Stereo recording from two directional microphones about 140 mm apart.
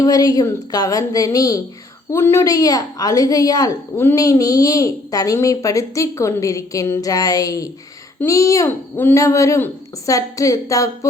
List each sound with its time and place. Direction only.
0.0 s a woman's voice: 25° left (ahead or behind)